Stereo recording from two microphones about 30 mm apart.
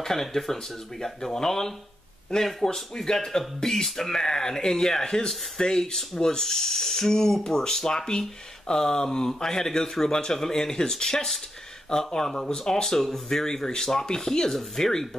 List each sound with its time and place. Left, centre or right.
0.0 s speech: centre